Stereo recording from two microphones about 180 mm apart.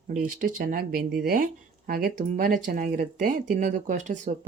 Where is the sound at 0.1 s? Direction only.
50° right (ahead or behind).